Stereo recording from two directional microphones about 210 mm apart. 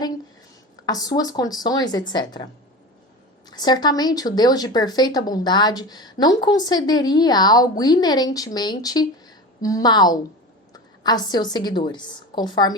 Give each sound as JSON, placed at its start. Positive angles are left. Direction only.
{"t": 0.9, "sound": "speech", "side_deg": 20}
{"t": 3.5, "sound": "a woman's voice", "side_deg": 20}